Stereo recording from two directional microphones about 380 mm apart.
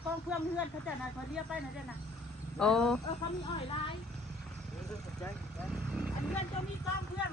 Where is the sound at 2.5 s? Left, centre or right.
Centre.